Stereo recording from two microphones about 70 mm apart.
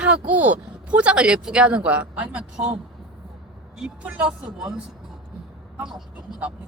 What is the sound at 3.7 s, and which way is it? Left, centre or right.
Speech, centre.